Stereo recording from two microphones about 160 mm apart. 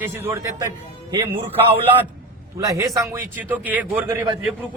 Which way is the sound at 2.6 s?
20° right (ahead or behind).